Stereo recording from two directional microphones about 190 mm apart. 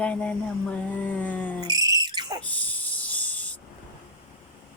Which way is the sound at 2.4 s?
10° left (ahead or behind).